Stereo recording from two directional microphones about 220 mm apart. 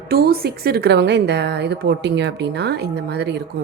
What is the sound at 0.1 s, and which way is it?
A woman's voice, 45° right (ahead or behind).